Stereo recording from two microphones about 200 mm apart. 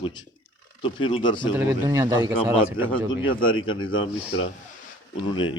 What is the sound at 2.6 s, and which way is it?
Speech, 10° right (ahead or behind).